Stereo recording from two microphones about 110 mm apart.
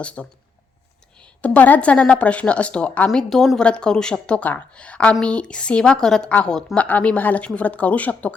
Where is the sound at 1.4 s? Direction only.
15° left (ahead or behind).